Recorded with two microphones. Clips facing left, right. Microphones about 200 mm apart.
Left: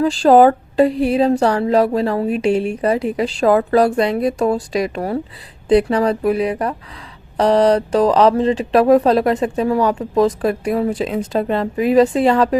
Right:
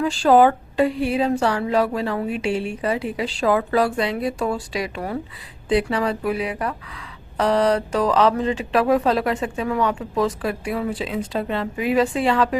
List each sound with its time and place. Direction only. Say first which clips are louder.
0.0 s speech: left 4 dB; 35° left (ahead or behind)